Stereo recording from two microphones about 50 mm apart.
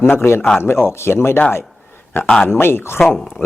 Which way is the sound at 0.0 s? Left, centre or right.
Left.